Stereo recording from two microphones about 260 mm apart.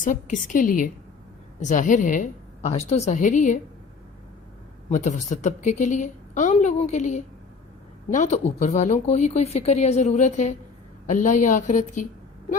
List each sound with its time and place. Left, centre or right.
0.0 s a woman's voice: left
4.9 s speech: left